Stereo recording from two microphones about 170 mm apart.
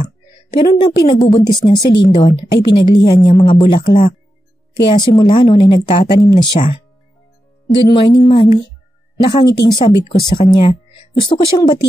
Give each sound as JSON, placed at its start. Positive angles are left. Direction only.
{"t": 0.6, "sound": "a woman's voice", "side_deg": 30}
{"t": 4.8, "sound": "a woman's voice", "side_deg": 25}